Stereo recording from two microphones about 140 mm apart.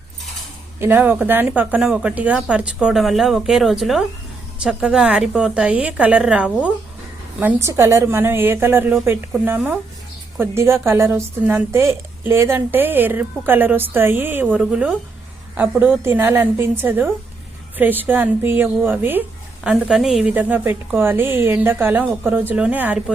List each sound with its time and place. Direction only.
0.8 s a woman's voice: 15° right (ahead or behind)